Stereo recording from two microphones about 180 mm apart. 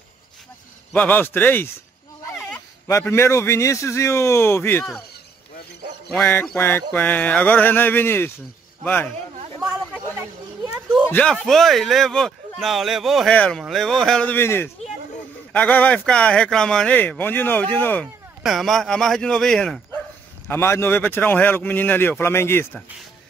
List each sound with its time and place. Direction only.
0.9 s speech: 10° left (ahead or behind)
6.1 s speech: 5° left (ahead or behind)
10.1 s a sound: 10° right (ahead or behind)
11.1 s speech: 10° left (ahead or behind)
20.4 s speech: 15° left (ahead or behind)